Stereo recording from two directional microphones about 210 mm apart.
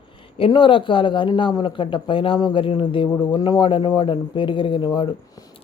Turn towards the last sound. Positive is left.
turn(degrees=20)  # may be behind; listen again after turning